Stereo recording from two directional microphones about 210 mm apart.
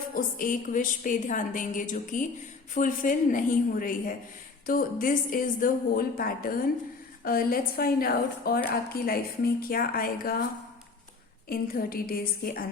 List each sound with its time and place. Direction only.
0.1 s a woman's voice: 40° left (ahead or behind)
11.4 s a woman's voice: 45° left (ahead or behind)